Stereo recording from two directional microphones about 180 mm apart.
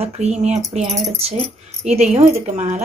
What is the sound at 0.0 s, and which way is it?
Speech, 35° right (ahead or behind).